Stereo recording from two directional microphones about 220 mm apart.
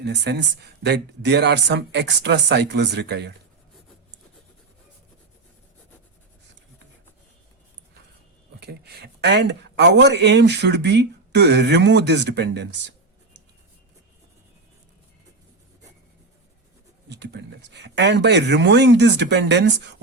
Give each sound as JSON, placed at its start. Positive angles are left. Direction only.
{"t": 0.0, "sound": "speech", "side_deg": -50}
{"t": 8.6, "sound": "speech", "side_deg": -50}
{"t": 17.1, "sound": "speech", "side_deg": -50}